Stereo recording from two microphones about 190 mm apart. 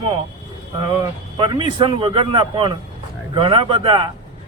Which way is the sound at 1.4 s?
25° right (ahead or behind).